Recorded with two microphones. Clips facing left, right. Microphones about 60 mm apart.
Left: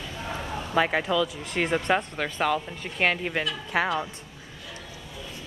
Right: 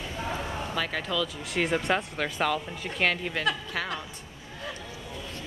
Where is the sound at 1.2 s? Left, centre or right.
Centre.